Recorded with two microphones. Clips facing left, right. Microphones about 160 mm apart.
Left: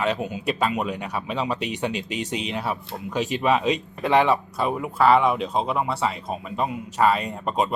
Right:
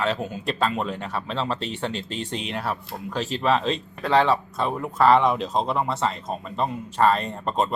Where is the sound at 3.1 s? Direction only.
15° left (ahead or behind).